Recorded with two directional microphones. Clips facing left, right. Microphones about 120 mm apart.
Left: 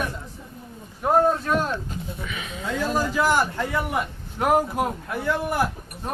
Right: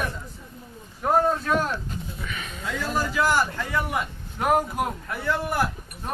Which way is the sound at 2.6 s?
15° left (ahead or behind).